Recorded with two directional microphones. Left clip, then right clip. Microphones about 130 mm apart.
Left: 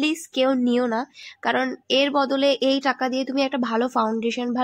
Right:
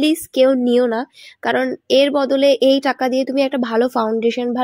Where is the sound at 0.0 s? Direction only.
35° right (ahead or behind).